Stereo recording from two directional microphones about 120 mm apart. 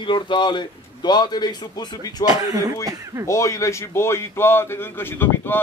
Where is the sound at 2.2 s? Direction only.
30° right (ahead or behind).